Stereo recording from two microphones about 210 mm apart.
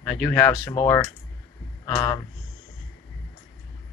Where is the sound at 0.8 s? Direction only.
25° left (ahead or behind).